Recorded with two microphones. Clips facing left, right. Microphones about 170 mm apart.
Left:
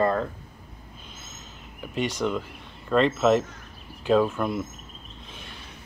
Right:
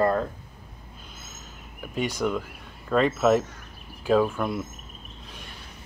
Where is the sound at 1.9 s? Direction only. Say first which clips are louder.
Even; 10° right (ahead or behind).